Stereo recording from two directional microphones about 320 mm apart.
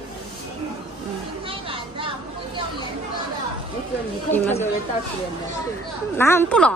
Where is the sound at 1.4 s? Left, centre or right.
Centre.